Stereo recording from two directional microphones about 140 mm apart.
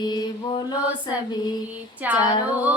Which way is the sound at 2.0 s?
10° right (ahead or behind).